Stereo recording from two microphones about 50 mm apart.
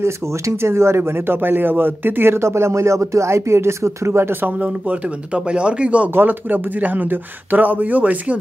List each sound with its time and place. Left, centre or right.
0.0 s speech: right
4.6 s speech: right
6.0 s speech: right